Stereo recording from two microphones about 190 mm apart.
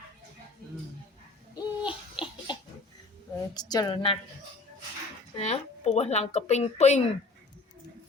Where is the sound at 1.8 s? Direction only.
25° left (ahead or behind).